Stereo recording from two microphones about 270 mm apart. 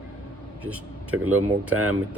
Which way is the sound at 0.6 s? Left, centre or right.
Centre.